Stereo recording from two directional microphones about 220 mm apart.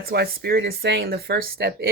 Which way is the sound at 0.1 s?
45° right (ahead or behind).